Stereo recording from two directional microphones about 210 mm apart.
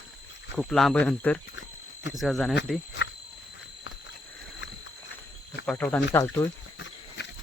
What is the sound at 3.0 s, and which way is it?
Wild animals, 60° left (ahead or behind).